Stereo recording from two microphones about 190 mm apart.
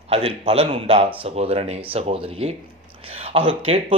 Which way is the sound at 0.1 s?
30° right (ahead or behind).